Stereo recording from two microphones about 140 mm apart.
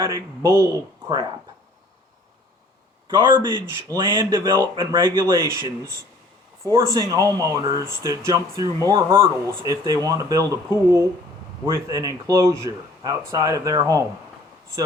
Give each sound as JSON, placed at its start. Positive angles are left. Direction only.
{"t": 0.4, "sound": "speech", "side_deg": -20}
{"t": 3.1, "sound": "speech", "side_deg": -35}